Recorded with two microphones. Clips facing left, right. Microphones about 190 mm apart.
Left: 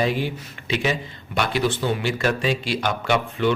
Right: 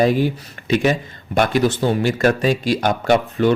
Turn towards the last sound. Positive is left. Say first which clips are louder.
# right 5 dB
turn(degrees=-45)  # may be behind; listen again after turning